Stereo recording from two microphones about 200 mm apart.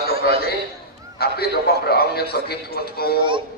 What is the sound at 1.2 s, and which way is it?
A man's voice, 50° left (ahead or behind).